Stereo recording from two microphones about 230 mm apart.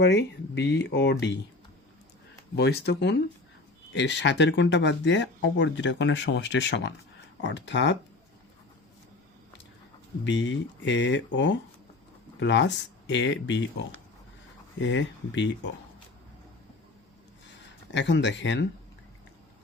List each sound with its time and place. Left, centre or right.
0.0 s speech: left
2.6 s speech: left
10.2 s speech: left
17.9 s speech: left